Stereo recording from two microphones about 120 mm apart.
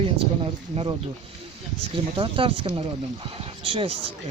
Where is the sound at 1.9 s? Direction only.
45° right (ahead or behind).